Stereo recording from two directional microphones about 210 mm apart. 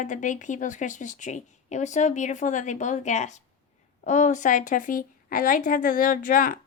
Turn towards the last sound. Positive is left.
turn(degrees=40)  # may be behind; listen again after turning